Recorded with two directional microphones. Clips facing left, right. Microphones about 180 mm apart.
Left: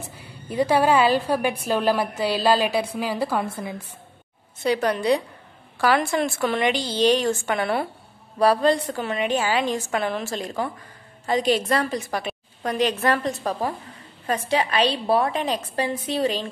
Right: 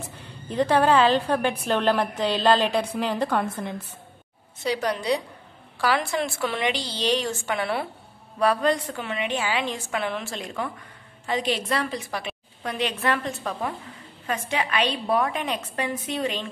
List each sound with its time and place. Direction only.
0.1 s a woman's voice: 10° left (ahead or behind)
4.6 s a woman's voice: 55° left (ahead or behind)
8.4 s a woman's voice: 35° left (ahead or behind)